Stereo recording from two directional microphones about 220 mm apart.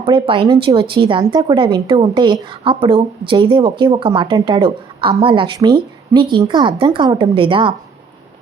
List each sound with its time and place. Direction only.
0.0 s speech: 25° right (ahead or behind)